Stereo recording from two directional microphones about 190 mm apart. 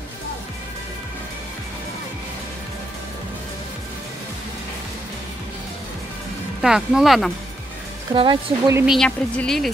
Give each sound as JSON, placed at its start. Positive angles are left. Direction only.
{"t": 6.6, "sound": "a woman's voice", "side_deg": -5}
{"t": 8.1, "sound": "speech", "side_deg": -25}
{"t": 8.8, "sound": "a woman's voice", "side_deg": 0}